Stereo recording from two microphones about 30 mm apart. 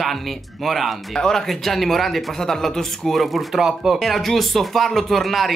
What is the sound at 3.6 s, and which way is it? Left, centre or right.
Speech, centre.